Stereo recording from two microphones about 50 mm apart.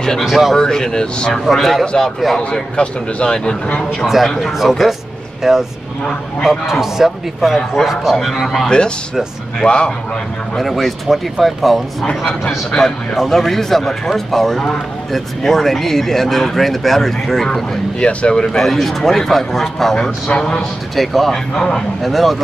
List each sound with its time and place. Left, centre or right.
0.3 s speech: centre
0.6 s a man's voice: centre
1.4 s a man's voice: centre
4.0 s speech: centre
8.6 s speech: centre
10.6 s a man's voice: centre
18.0 s a man's voice: centre
20.9 s speech: centre
21.5 s a man's voice: centre
22.0 s speech: centre